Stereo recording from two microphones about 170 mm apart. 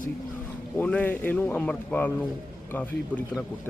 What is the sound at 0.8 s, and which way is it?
Speech, 10° left (ahead or behind).